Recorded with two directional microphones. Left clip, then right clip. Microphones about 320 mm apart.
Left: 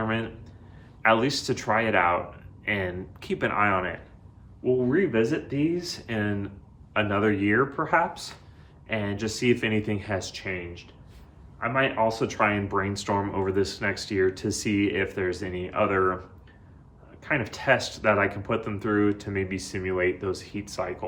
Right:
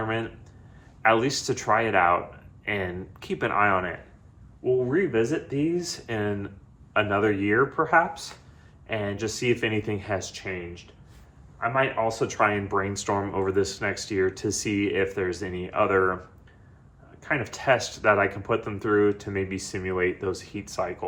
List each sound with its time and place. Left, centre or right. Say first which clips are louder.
0.0 s speech: even; centre
17.2 s speech: even; centre